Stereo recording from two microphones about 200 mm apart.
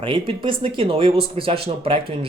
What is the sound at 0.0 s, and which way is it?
Speech, 25° right (ahead or behind).